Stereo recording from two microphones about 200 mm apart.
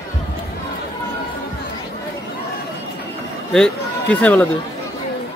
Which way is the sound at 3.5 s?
5° left (ahead or behind).